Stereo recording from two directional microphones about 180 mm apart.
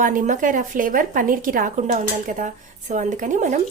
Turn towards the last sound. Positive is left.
turn(degrees=-45)  # may be behind; listen again after turning